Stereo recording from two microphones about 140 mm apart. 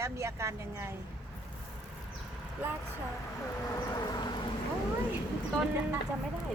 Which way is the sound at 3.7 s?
25° left (ahead or behind).